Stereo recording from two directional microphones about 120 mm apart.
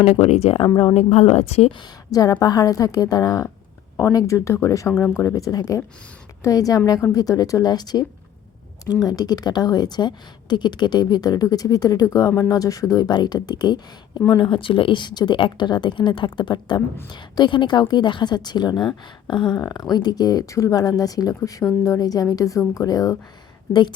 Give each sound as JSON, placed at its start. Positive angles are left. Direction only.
{"t": 0.0, "sound": "a woman's voice", "side_deg": 60}
{"t": 2.0, "sound": "a woman's voice", "side_deg": 30}